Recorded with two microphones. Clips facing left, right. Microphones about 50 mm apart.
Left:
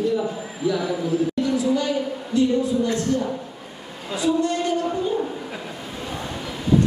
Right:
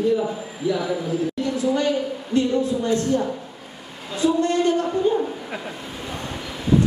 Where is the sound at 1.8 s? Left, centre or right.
Right.